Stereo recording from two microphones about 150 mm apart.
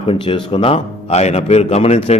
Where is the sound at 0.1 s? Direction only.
35° left (ahead or behind).